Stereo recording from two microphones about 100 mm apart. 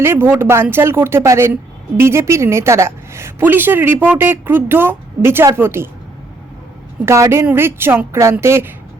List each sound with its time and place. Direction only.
0.0 s a woman's voice: 25° right (ahead or behind)
7.0 s a woman's voice: 25° right (ahead or behind)